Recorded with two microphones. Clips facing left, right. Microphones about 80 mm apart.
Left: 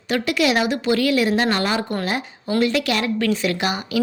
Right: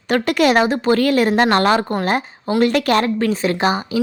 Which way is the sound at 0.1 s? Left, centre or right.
Right.